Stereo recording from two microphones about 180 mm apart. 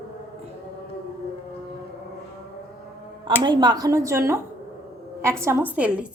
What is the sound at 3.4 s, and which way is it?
A woman's voice, 25° right (ahead or behind).